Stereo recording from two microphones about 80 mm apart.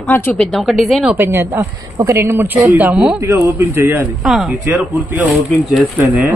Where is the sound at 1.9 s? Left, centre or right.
Right.